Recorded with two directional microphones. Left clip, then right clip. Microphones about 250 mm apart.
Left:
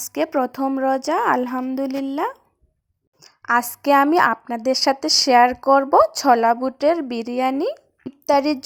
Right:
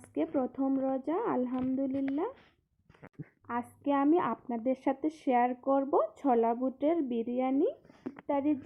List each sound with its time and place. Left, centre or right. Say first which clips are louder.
0.1 s a woman's voice: left 11 dB; left
3.4 s a woman's voice: left 16 dB; left